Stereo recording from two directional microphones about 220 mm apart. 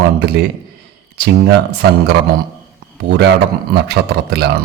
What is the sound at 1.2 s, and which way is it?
Speech, 50° right (ahead or behind).